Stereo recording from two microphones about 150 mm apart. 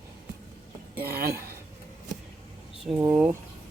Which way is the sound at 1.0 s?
85° right.